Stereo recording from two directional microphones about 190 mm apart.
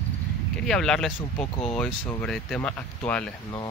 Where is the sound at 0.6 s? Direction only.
5° left (ahead or behind).